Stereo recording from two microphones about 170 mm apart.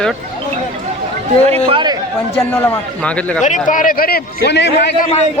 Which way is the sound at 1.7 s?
25° right (ahead or behind).